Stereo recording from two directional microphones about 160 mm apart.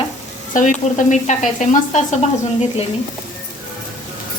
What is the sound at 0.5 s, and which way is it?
Speech, 50° left (ahead or behind).